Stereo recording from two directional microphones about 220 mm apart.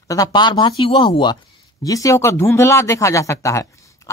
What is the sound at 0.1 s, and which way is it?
Speech, 15° left (ahead or behind).